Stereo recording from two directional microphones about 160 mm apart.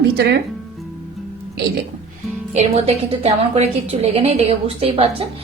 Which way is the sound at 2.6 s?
40° right (ahead or behind).